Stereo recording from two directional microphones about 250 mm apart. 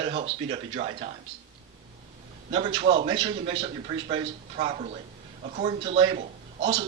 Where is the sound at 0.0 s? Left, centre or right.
Right.